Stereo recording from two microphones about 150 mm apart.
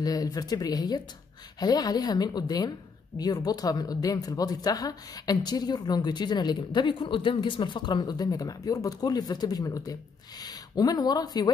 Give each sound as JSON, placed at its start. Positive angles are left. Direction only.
{"t": 0.0, "sound": "a woman's voice", "side_deg": 25}